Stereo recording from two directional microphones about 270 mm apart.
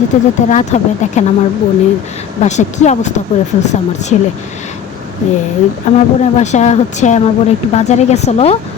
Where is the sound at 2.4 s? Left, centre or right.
Left.